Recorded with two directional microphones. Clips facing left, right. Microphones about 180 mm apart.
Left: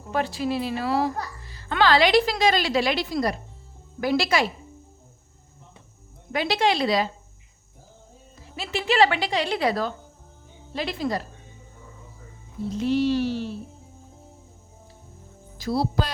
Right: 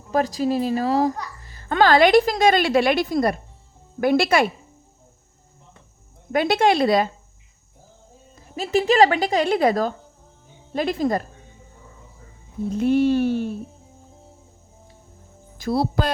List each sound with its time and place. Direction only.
0.1 s a woman's voice: 40° right (ahead or behind); by 4.5 s 55° right (ahead or behind)
6.3 s a woman's voice: 50° right (ahead or behind)
8.5 s a woman's voice: 40° right (ahead or behind)
12.7 s a sound: 55° right (ahead or behind)
15.5 s speech: 55° right (ahead or behind)